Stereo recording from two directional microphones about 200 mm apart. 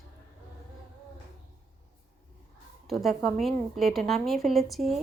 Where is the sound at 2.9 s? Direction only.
Centre (ahead or behind).